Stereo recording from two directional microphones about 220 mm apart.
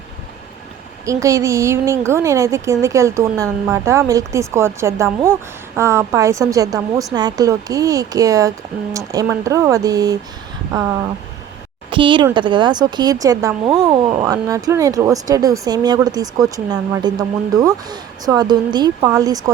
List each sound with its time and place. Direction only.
1.0 s a woman's voice: 15° right (ahead or behind)